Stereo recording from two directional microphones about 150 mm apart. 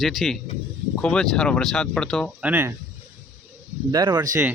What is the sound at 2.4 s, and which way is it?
Speech, 15° right (ahead or behind).